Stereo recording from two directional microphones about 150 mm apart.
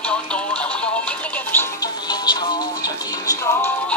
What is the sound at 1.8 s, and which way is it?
Music, 30° left (ahead or behind).